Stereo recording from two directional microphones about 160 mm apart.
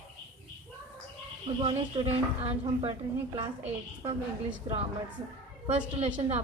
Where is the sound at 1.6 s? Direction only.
35° right (ahead or behind).